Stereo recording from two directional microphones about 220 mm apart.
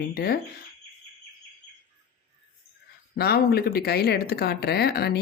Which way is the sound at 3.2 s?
45° left (ahead or behind).